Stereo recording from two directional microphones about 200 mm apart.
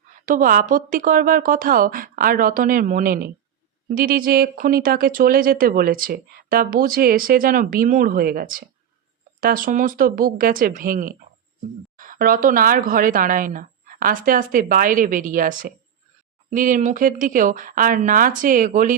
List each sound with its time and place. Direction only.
0.3 s speech: 45° right (ahead or behind)